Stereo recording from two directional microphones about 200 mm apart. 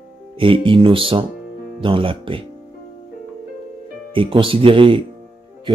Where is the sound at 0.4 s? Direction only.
25° right (ahead or behind).